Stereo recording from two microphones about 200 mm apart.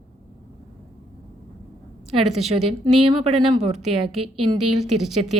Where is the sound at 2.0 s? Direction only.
30° right (ahead or behind).